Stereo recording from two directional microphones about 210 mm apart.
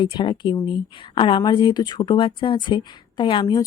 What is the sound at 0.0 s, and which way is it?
A woman's voice, 20° left (ahead or behind).